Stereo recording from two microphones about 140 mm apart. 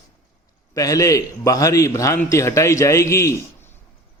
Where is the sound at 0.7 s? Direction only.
25° left (ahead or behind).